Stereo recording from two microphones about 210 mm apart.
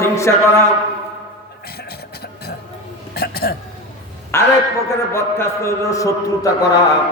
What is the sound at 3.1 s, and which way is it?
Hiccup, 45° left (ahead or behind).